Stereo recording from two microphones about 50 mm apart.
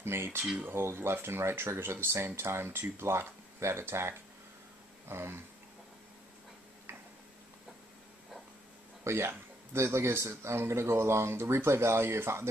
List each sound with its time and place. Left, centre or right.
0.0 s speech: right
5.0 s a sound: right
6.9 s tick-tock: right
9.0 s speech: right